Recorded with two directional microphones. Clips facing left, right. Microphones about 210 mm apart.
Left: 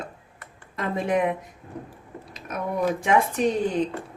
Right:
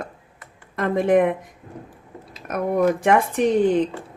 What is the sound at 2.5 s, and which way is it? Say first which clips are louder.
Speech: right 6 dB; 60° right (ahead or behind).